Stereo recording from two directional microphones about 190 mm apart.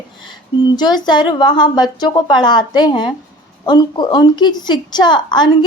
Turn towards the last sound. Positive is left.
turn(degrees=25)  # may be behind; listen again after turning